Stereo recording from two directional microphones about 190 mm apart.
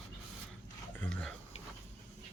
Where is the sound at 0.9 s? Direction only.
5° left (ahead or behind).